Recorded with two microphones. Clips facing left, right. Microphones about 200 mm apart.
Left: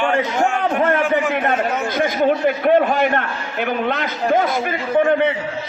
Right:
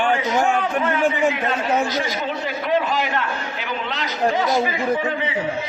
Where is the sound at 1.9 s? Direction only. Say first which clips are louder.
Left 7 dB; 55° left (ahead or behind).